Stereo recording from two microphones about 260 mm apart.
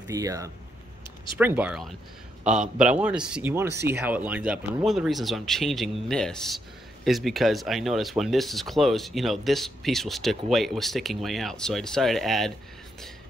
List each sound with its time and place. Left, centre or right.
0.1 s speech: centre